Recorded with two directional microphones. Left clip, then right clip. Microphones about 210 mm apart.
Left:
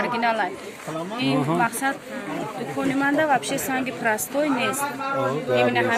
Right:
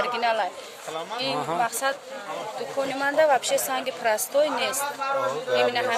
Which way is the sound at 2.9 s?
40° right (ahead or behind).